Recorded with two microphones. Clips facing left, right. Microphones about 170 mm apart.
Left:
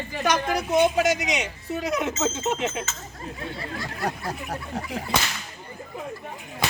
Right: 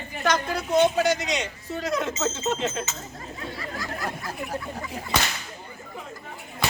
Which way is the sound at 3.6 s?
25° left (ahead or behind).